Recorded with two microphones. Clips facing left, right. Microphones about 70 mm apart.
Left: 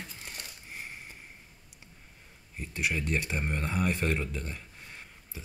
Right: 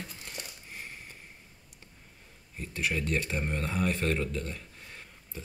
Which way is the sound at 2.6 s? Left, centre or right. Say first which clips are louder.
Even; centre.